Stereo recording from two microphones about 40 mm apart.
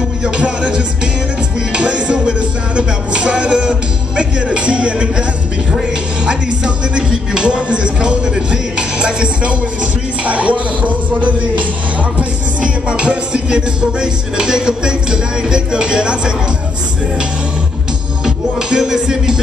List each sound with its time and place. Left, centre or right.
0.2 s music: right
10.2 s speech: right
12.2 s music: right
18.2 s music: centre